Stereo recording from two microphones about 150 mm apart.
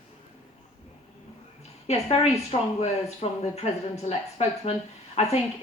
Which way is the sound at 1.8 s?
45° left (ahead or behind).